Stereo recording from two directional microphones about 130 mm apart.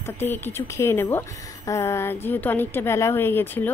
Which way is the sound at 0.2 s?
20° left (ahead or behind).